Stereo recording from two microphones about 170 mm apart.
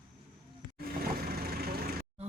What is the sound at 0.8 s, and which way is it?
Vehicle, 65° right (ahead or behind).